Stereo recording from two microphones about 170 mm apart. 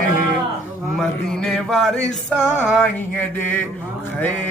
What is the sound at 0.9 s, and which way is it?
Mantra, 5° left (ahead or behind).